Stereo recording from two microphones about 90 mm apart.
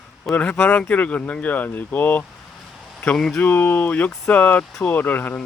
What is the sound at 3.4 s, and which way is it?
Speech, 20° left (ahead or behind).